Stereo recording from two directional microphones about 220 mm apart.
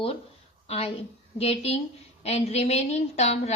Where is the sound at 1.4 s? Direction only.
30° left (ahead or behind).